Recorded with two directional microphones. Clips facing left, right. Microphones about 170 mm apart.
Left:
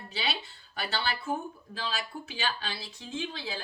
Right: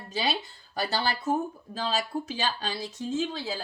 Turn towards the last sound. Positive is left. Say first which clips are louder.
# right 6 dB
turn(degrees=-40)  # may be behind; listen again after turning